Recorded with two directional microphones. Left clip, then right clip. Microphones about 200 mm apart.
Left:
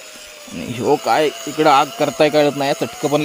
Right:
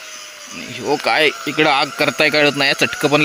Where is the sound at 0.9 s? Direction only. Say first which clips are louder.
Right 1 dB; centre (ahead or behind).